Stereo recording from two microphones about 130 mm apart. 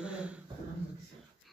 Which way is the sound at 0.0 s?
10° right (ahead or behind).